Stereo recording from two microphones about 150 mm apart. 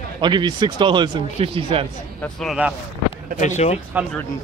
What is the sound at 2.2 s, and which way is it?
Speech, centre (ahead or behind).